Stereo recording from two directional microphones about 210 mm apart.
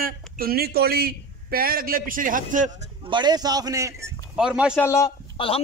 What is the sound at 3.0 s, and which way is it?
A man's voice, 20° right (ahead or behind).